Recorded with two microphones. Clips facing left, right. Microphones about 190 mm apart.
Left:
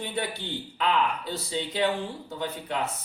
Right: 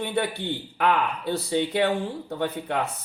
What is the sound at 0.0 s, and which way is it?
Speech, 60° right (ahead or behind).